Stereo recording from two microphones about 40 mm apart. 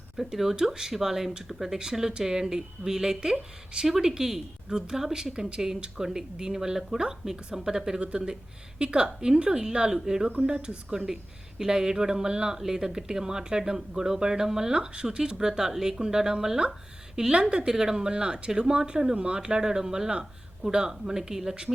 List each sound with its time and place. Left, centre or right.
0.2 s speech: centre
8.0 s speech: right
10.4 s speech: right